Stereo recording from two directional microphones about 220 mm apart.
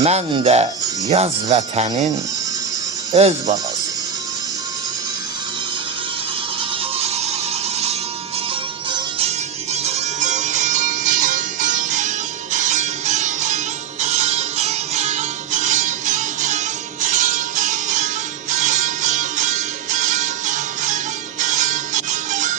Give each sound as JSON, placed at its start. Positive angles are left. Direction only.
{"t": 0.0, "sound": "speech", "side_deg": -30}
{"t": 3.1, "sound": "speech", "side_deg": -30}
{"t": 8.9, "sound": "music", "side_deg": -25}